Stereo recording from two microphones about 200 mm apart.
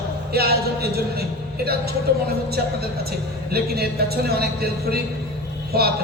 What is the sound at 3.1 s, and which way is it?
A man's voice, 50° right (ahead or behind).